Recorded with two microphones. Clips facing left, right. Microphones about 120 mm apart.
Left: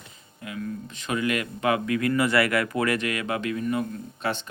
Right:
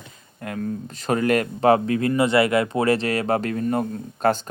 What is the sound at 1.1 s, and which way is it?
Speech, 40° right (ahead or behind).